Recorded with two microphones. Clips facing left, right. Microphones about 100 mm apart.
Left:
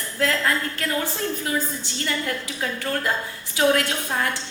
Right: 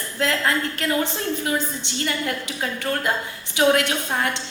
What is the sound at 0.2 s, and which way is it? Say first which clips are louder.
A woman's voice: right 1 dB; 20° right (ahead or behind).